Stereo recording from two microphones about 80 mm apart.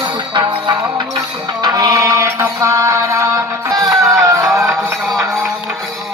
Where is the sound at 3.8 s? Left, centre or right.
Right.